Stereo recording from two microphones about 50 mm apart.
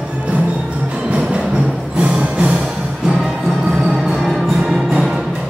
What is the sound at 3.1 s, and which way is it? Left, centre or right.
Music, centre.